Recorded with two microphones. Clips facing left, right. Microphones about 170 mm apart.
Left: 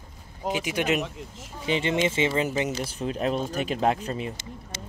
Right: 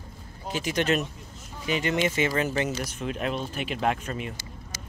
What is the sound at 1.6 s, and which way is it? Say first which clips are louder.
Speech: left 1 dB; 25° left (ahead or behind).